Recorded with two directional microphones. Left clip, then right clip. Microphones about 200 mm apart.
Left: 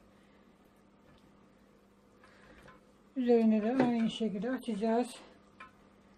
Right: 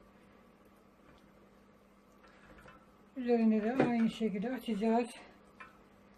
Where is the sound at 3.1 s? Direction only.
35° left (ahead or behind).